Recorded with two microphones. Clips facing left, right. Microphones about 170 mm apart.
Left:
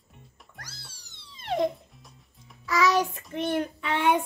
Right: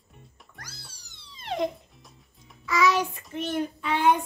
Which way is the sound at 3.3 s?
60° left (ahead or behind).